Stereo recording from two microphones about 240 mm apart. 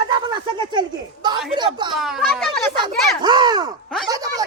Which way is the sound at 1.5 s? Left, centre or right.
Centre.